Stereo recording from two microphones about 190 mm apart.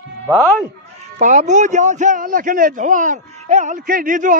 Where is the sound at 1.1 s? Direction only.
40° right (ahead or behind).